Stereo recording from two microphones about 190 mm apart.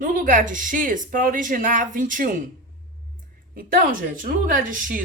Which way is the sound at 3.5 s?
45° right (ahead or behind).